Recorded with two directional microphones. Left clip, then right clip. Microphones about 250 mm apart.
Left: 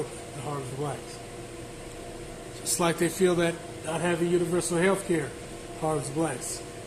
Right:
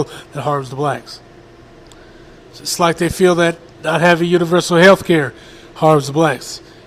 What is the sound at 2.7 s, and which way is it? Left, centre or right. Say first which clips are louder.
Speech: right 11 dB; right.